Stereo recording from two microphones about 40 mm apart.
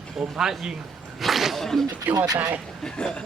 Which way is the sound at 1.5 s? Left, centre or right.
Centre.